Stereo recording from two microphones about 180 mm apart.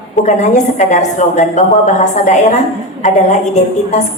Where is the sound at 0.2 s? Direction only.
40° left (ahead or behind).